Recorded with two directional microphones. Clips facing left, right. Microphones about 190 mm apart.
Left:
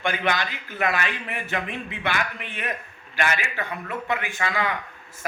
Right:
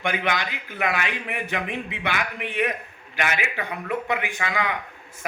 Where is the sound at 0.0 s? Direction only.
15° right (ahead or behind).